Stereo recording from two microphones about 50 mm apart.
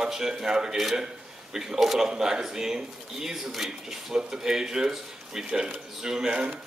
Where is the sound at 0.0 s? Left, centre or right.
Centre.